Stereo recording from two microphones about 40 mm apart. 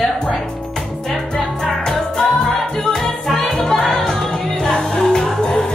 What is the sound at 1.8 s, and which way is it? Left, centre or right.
Music, centre.